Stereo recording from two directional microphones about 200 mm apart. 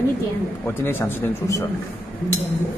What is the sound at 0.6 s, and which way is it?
Speech, 10° left (ahead or behind).